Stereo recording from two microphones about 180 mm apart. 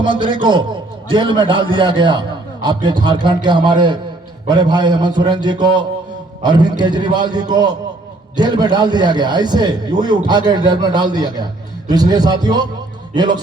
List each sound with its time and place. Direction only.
0.0 s a man's voice: 25° right (ahead or behind)